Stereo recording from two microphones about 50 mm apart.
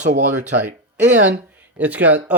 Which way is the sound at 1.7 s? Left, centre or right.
Right.